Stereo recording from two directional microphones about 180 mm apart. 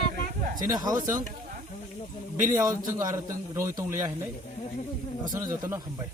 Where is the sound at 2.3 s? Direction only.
15° right (ahead or behind).